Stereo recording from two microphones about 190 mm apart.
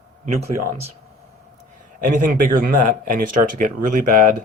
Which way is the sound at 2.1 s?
45° right (ahead or behind).